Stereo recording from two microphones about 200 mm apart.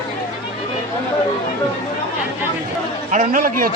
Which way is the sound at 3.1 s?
40° right (ahead or behind).